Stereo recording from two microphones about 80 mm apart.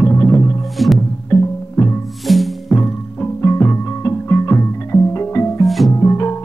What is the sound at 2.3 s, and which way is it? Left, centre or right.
Music, centre.